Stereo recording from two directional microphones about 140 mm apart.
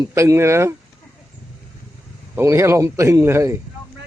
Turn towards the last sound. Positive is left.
turn(degrees=-20)  # may be behind; listen again after turning